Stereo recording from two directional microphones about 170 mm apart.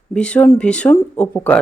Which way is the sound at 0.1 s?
5° left (ahead or behind).